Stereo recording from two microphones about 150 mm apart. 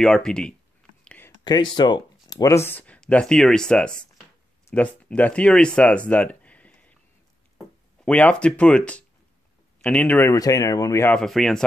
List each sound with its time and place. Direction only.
0.0 s speech: 5° left (ahead or behind)
1.0 s a sound: 10° left (ahead or behind)
1.4 s speech: 30° left (ahead or behind)
11.1 s speech: 5° left (ahead or behind)